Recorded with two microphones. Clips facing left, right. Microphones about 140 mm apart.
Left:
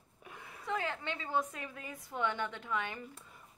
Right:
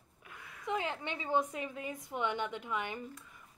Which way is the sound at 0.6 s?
15° right (ahead or behind).